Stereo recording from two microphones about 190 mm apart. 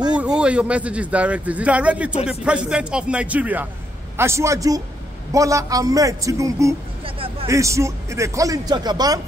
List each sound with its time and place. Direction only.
0.1 s speech: 5° right (ahead or behind)